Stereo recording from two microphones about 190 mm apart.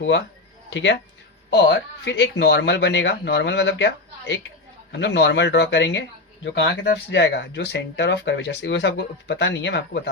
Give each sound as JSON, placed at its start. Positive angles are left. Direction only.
{"t": 0.7, "sound": "speech", "side_deg": 70}